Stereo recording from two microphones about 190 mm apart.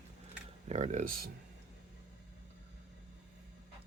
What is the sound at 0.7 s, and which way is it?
Speech, 40° right (ahead or behind).